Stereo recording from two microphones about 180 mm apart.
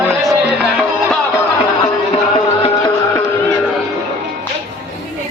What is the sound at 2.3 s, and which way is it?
Music, 30° left (ahead or behind).